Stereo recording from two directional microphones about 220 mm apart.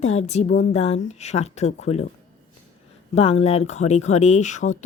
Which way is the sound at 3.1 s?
25° left (ahead or behind).